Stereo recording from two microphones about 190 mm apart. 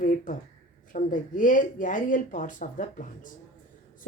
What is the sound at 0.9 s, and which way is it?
Speech, 45° left (ahead or behind).